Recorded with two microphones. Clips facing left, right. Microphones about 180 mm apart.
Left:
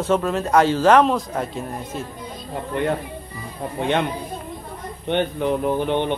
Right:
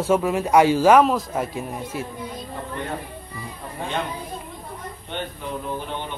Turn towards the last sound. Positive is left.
turn(degrees=70)  # may be behind; listen again after turning